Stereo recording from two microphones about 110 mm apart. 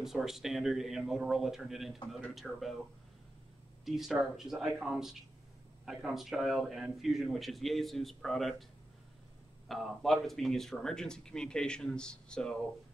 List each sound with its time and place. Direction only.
0.0 s speech: 5° right (ahead or behind)
3.8 s speech: centre (ahead or behind)
9.7 s speech: centre (ahead or behind)